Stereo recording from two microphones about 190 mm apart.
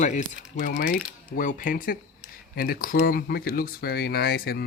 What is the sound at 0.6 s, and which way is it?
Speech, 50° left (ahead or behind).